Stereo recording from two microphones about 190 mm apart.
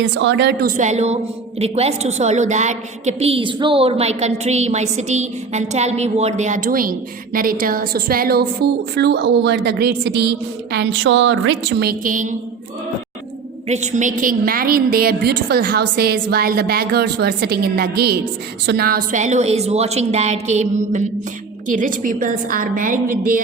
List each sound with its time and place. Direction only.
0.2 s a woman's voice: 65° right (ahead or behind)
0.8 s a woman's voice: 35° right (ahead or behind)
13.7 s a woman's voice: 35° right (ahead or behind)